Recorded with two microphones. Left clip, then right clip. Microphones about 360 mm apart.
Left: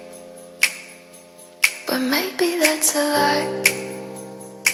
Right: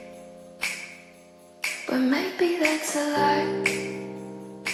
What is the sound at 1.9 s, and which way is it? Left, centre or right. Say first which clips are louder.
Music: left 3 dB; left.